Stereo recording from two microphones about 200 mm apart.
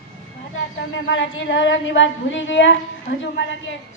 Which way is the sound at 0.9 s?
65° left (ahead or behind).